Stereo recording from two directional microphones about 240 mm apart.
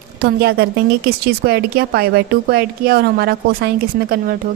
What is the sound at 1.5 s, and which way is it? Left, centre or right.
Speech, right.